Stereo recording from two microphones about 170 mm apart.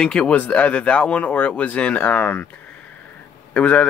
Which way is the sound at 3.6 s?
5° left (ahead or behind).